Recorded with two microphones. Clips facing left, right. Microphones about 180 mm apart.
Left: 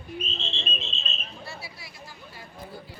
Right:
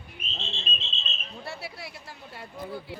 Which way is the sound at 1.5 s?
65° right (ahead or behind).